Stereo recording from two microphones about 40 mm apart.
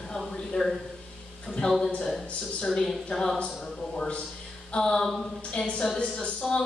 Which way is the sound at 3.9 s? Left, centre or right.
Left.